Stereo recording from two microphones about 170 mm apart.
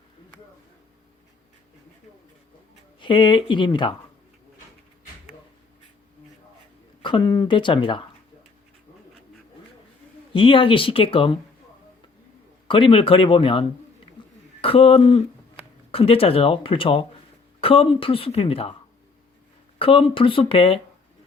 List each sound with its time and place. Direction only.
3.0 s speech: 30° left (ahead or behind)
7.0 s speech: 25° left (ahead or behind)
10.3 s speech: 30° left (ahead or behind)
12.6 s speech: 30° left (ahead or behind)
14.2 s a sound: 30° left (ahead or behind)
14.6 s speech: 35° left (ahead or behind)
19.8 s speech: 30° left (ahead or behind)